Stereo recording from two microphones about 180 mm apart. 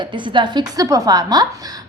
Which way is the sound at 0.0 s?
25° right (ahead or behind).